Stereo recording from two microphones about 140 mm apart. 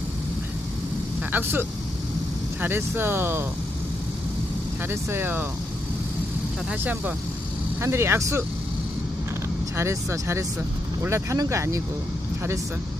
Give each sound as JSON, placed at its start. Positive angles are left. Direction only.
{"t": 1.3, "sound": "speech", "side_deg": -15}
{"t": 4.8, "sound": "speech", "side_deg": -15}
{"t": 6.7, "sound": "speech", "side_deg": -10}
{"t": 9.7, "sound": "speech", "side_deg": -20}